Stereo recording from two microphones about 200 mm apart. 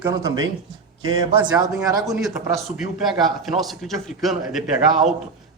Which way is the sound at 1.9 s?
20° right (ahead or behind).